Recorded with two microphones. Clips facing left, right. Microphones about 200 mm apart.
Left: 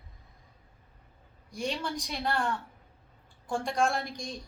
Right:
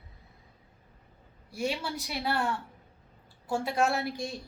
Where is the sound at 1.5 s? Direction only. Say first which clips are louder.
Right 1 dB; 5° right (ahead or behind).